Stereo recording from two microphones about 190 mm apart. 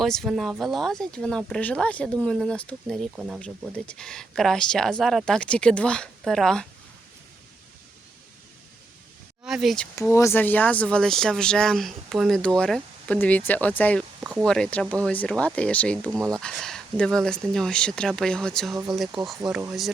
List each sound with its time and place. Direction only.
0.0 s speech: centre (ahead or behind)
9.4 s speech: centre (ahead or behind)
10.1 s speech: 15° left (ahead or behind)
16.0 s speech: 15° right (ahead or behind)
16.4 s speech: 5° left (ahead or behind)
18.7 s speech: 15° right (ahead or behind)
19.4 s speech: centre (ahead or behind)